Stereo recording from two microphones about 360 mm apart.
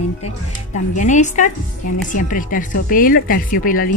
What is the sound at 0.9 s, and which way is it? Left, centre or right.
Music, centre.